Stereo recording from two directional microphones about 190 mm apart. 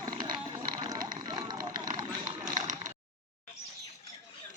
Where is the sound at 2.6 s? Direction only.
40° right (ahead or behind).